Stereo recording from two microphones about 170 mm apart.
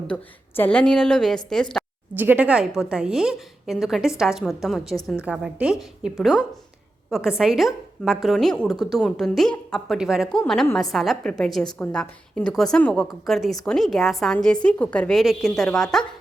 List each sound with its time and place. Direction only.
0.1 s a woman's voice: 10° left (ahead or behind)
2.1 s a woman's voice: 10° right (ahead or behind)
4.9 s a woman's voice: 20° left (ahead or behind)
5.2 s a woman's voice: 5° right (ahead or behind)